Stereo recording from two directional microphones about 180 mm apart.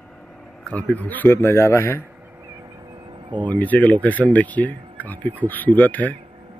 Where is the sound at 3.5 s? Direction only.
10° left (ahead or behind).